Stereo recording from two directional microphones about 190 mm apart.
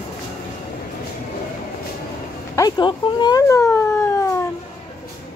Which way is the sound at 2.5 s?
20° left (ahead or behind).